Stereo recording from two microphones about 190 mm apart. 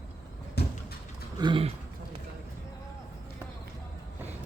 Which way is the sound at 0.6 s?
60° left (ahead or behind).